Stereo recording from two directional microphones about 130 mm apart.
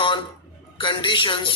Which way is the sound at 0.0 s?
40° left (ahead or behind).